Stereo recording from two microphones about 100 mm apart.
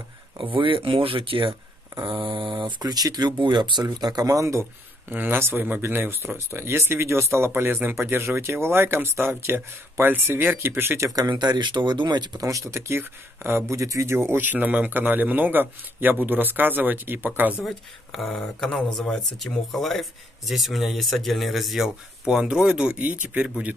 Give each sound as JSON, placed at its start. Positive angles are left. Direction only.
{"t": 0.4, "sound": "speech", "side_deg": -60}
{"t": 2.8, "sound": "speech", "side_deg": -40}
{"t": 5.1, "sound": "speech", "side_deg": -20}
{"t": 11.1, "sound": "speech", "side_deg": -45}
{"t": 17.6, "sound": "speech", "side_deg": 0}